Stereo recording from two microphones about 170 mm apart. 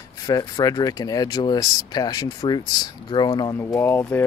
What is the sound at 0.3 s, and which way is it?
Speech, 20° left (ahead or behind).